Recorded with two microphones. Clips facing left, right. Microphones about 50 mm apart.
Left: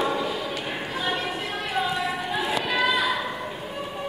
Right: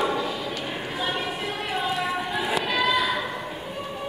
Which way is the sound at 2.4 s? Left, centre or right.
Centre.